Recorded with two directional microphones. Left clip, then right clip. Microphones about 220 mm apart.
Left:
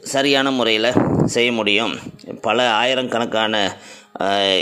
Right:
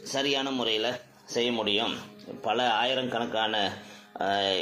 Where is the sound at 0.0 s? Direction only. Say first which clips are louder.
Left 11 dB; 50° left (ahead or behind).